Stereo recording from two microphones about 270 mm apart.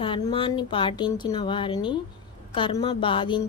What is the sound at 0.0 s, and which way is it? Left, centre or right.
A woman's voice, centre.